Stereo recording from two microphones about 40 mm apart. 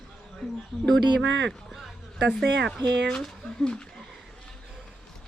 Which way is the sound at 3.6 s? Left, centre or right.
Left.